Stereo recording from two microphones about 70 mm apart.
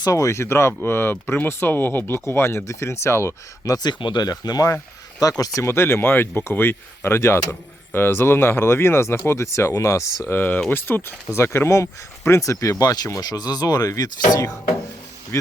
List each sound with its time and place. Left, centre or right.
0.0 s speech: left
3.8 s speech: left
5.5 s speech: left
10.2 s speech: left
12.8 s speech: left
13.1 s speech: left